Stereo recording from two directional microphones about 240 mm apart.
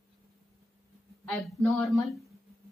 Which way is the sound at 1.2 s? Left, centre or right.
Centre.